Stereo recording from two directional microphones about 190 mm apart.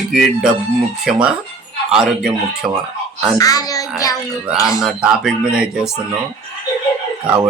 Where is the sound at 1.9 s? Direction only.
Centre (ahead or behind).